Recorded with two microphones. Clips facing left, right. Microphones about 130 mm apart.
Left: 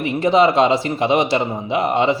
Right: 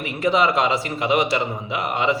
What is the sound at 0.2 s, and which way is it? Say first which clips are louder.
A man's voice: left 5 dB; 30° left (ahead or behind).